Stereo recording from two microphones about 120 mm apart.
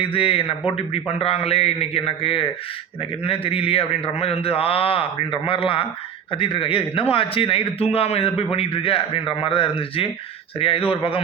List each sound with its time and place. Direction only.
0.0 s a man's voice: 50° left (ahead or behind)